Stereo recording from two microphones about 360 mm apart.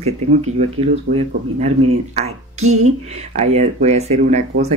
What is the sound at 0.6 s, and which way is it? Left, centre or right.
Speech, centre.